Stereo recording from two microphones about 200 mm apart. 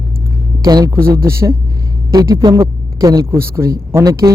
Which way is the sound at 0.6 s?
20° right (ahead or behind).